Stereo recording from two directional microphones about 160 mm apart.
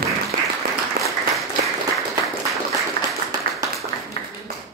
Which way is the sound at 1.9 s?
Centre (ahead or behind).